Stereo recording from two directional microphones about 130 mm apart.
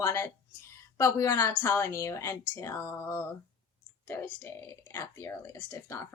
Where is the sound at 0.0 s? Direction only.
20° left (ahead or behind).